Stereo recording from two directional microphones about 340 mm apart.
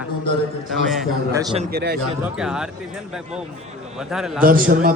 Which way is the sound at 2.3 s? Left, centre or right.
Centre.